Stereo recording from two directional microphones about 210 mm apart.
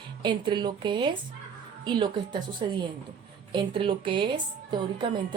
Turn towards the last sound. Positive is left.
turn(degrees=-20)  # may be behind; listen again after turning